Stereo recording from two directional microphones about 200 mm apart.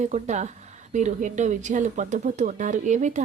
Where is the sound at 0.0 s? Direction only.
35° right (ahead or behind).